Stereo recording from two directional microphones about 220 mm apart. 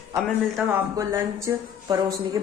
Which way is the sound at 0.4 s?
5° right (ahead or behind).